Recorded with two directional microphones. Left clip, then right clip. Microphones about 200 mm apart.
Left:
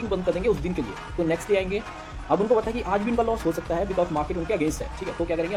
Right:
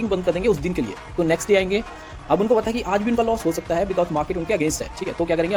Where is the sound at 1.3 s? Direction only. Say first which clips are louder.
Right 6 dB; 45° right (ahead or behind).